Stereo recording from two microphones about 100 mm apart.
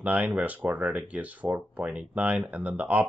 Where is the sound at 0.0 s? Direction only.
15° right (ahead or behind).